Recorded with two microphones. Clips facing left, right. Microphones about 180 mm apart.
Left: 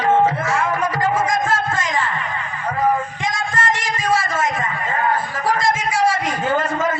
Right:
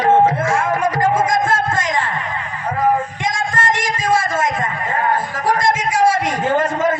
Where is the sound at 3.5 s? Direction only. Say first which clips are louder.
Right 2 dB; 50° right (ahead or behind).